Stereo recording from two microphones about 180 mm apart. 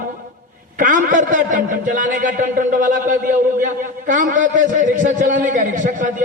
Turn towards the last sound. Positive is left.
turn(degrees=-45)  # may be behind; listen again after turning